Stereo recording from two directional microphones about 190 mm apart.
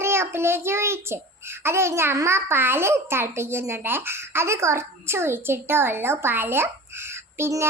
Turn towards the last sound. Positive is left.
turn(degrees=-15)  # may be behind; listen again after turning